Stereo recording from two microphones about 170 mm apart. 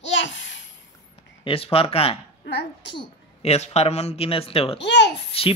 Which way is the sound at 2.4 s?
90° left.